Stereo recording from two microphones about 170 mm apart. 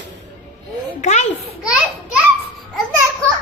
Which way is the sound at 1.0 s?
45° left (ahead or behind).